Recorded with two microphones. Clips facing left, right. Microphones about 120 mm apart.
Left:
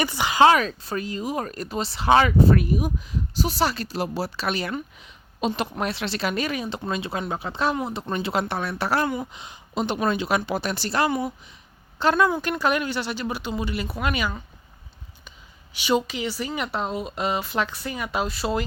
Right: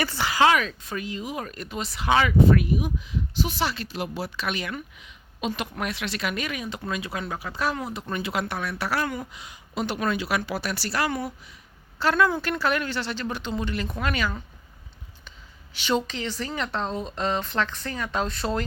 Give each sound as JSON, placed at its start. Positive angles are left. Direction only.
{"t": 0.0, "sound": "speech", "side_deg": 15}
{"t": 15.7, "sound": "speech", "side_deg": 10}